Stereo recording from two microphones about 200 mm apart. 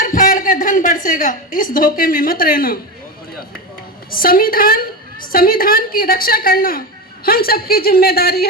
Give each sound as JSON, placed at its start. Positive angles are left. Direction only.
{"t": 0.0, "sound": "a woman's voice", "side_deg": 40}
{"t": 4.1, "sound": "a woman's voice", "side_deg": 45}